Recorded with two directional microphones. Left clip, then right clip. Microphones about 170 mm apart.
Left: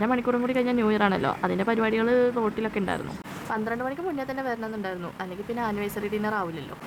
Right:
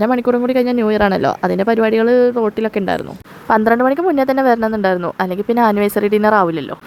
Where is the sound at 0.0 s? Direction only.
40° right (ahead or behind).